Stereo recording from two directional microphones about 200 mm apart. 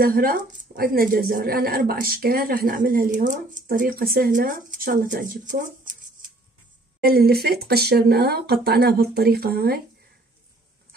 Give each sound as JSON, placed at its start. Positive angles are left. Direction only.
{"t": 0.0, "sound": "speech", "side_deg": -45}
{"t": 7.0, "sound": "speech", "side_deg": -50}